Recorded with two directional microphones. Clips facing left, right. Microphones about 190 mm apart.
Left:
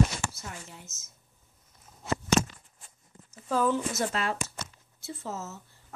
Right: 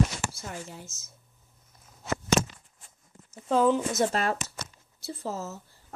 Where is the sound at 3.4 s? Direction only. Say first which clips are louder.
Right 4 dB; 20° right (ahead or behind).